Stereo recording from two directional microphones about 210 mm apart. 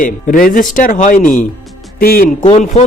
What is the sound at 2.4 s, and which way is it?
Speech, 30° left (ahead or behind).